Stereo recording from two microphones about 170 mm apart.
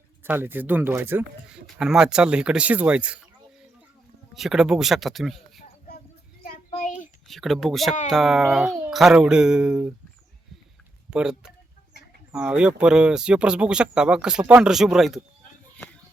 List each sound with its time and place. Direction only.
0.2 s speech: 10° right (ahead or behind)
4.4 s speech: centre (ahead or behind)
6.7 s a sound: 50° left (ahead or behind)
7.3 s speech: centre (ahead or behind)
11.1 s speech: 5° right (ahead or behind)